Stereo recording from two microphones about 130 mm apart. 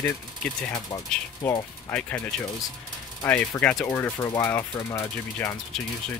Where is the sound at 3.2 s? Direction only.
15° left (ahead or behind).